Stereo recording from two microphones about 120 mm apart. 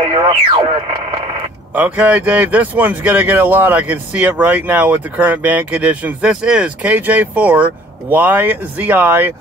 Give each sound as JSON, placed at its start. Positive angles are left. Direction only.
{"t": 0.0, "sound": "speech", "side_deg": -45}
{"t": 1.8, "sound": "speech", "side_deg": -10}